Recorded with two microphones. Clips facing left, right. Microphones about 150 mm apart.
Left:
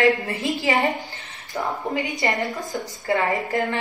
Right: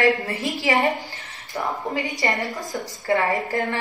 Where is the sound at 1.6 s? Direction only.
20° left (ahead or behind).